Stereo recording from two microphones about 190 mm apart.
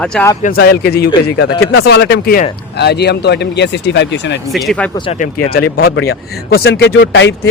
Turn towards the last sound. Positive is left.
turn(degrees=75)  # may be behind; listen again after turning